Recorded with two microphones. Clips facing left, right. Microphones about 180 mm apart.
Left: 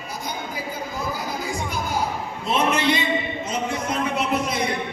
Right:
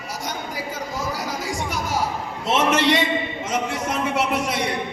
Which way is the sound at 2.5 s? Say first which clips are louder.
Right 2 dB; 90° right.